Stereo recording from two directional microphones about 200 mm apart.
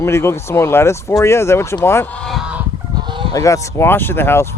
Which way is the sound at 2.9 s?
25° right (ahead or behind).